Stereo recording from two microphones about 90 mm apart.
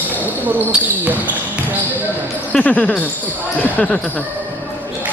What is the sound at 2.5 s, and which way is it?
Speech, 15° left (ahead or behind).